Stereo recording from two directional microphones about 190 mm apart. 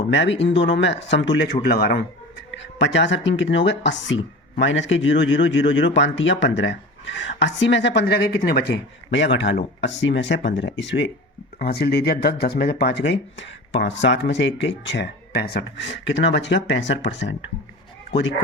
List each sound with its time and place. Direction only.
0.1 s speech: 70° left (ahead or behind)
1.6 s speech: 55° left (ahead or behind)
2.6 s speech: 70° left (ahead or behind)
11.6 s speech: 55° left (ahead or behind)